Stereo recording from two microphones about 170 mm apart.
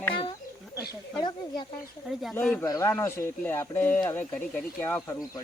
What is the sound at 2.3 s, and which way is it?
Speech, 15° left (ahead or behind).